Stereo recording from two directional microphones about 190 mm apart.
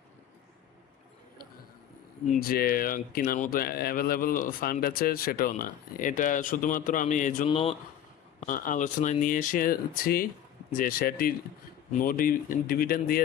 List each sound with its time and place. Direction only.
2.4 s speech: 50° left (ahead or behind); by 7.7 s 30° left (ahead or behind)
8.4 s speech: 45° left (ahead or behind)